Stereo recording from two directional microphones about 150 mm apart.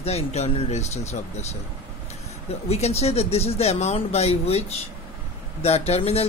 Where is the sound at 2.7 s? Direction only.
45° left (ahead or behind).